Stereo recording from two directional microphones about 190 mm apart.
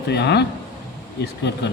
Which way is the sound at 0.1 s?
60° left (ahead or behind).